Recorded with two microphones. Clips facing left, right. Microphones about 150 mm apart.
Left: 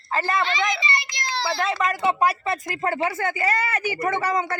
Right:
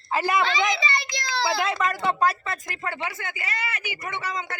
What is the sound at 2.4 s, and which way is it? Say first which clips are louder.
A woman's voice: left 7 dB; 35° left (ahead or behind).